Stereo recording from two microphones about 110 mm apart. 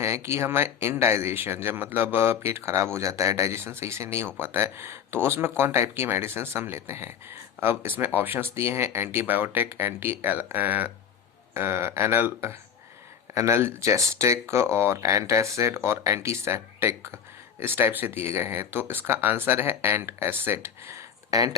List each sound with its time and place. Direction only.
0.0 s speech: 25° right (ahead or behind)